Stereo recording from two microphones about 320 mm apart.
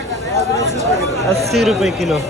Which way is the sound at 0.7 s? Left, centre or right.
Right.